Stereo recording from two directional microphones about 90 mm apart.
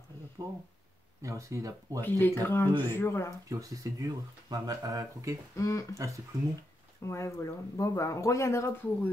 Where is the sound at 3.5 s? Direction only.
40° right (ahead or behind).